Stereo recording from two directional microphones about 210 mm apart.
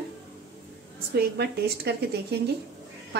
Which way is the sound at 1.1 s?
50° right (ahead or behind).